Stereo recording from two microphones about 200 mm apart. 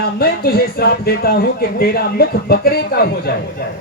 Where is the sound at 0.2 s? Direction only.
50° left (ahead or behind).